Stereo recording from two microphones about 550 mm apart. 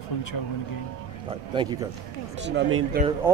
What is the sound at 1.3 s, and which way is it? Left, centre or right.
Speech, centre.